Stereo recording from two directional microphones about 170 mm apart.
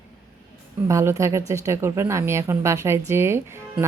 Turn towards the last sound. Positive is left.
turn(degrees=-15)  # may be behind; listen again after turning